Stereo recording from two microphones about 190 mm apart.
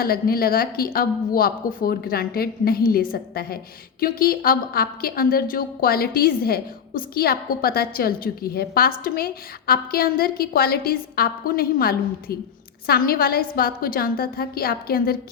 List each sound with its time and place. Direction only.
0.0 s a woman's voice: 50° left (ahead or behind)